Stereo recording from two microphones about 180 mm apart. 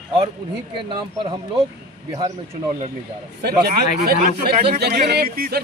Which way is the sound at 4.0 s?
65° right (ahead or behind).